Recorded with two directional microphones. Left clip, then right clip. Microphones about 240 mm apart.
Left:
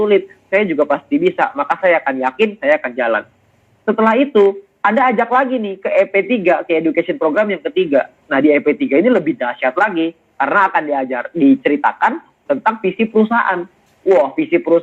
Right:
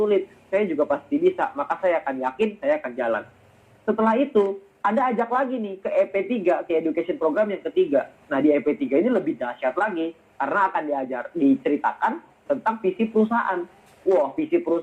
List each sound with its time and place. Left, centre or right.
0.0 s speech: left